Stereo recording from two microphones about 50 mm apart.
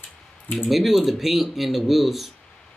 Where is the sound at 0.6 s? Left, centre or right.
Centre.